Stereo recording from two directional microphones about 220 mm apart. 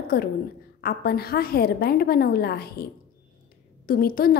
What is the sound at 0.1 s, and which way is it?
A woman's voice, 45° left (ahead or behind).